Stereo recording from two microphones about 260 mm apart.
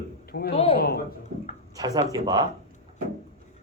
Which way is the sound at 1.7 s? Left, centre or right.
Centre.